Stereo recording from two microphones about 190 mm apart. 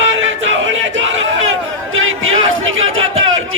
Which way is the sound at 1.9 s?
90° right.